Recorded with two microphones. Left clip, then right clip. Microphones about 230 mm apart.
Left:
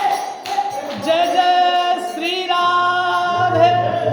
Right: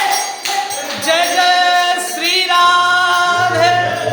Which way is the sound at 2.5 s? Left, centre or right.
Right.